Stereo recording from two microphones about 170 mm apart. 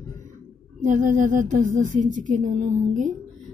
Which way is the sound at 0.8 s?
50° right (ahead or behind).